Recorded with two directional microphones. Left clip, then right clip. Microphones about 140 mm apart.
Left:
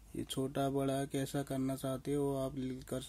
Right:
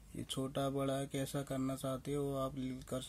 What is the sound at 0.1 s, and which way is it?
Speech, 20° left (ahead or behind).